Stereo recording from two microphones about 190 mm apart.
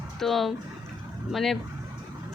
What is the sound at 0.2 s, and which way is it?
Speech, centre (ahead or behind).